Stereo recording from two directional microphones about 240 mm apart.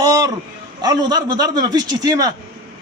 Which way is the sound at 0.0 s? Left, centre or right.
Centre.